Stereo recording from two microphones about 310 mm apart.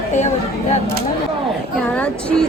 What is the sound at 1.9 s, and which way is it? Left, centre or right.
Speech, centre.